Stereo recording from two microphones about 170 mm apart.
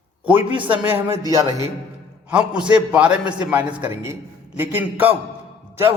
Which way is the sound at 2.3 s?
5° right (ahead or behind).